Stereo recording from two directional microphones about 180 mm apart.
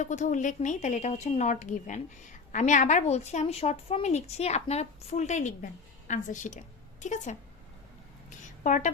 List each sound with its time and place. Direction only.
0.0 s a woman's voice: 40° left (ahead or behind)
8.6 s a woman's voice: 45° left (ahead or behind)